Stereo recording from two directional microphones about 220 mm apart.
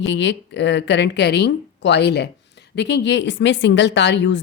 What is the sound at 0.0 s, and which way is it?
Speech, 55° left (ahead or behind).